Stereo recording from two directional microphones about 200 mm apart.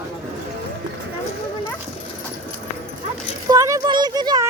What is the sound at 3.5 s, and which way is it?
A child's voice, 15° right (ahead or behind).